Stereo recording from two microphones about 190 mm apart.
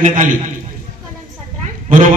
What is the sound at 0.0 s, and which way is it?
Speech, 40° right (ahead or behind).